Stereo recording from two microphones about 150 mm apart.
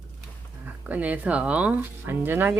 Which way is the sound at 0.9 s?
10° right (ahead or behind).